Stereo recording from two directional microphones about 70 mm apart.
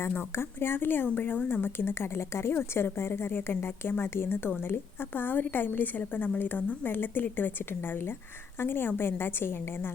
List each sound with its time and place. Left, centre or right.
0.3 s a woman's voice: left